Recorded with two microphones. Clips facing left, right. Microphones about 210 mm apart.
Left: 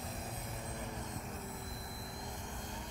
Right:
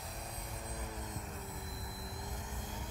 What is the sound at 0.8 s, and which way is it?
Vehicle, centre (ahead or behind).